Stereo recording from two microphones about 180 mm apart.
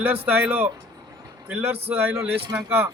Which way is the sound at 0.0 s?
10° right (ahead or behind).